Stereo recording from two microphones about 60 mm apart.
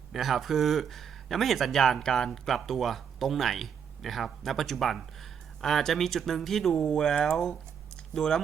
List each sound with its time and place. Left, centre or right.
0.1 s speech: centre